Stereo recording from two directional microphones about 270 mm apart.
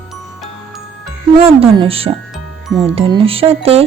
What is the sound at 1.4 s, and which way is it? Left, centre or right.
Speech, right.